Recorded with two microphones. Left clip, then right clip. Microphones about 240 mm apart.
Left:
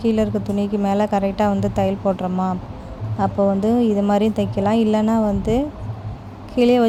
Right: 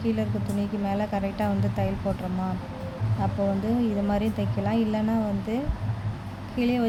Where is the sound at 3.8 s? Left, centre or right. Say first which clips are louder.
Left 9 dB; left.